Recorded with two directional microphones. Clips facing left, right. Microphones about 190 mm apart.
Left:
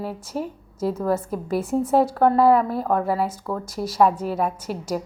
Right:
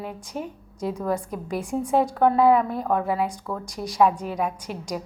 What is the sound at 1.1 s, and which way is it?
Speech, 5° left (ahead or behind).